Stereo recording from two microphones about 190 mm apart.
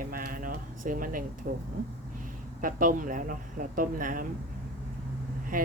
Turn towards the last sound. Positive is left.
turn(degrees=-45)  # may be behind; listen again after turning